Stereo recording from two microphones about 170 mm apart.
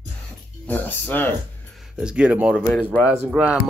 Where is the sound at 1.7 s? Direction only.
5° right (ahead or behind).